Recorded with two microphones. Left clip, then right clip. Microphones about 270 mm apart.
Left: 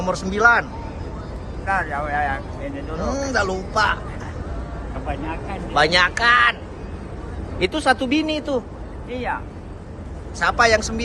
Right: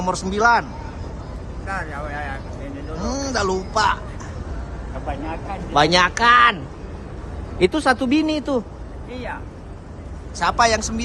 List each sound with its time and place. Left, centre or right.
0.0 s speech: centre
1.6 s speech: centre
3.0 s speech: centre
5.0 s speech: right
5.7 s speech: right
7.6 s speech: right
9.0 s speech: centre
10.4 s speech: centre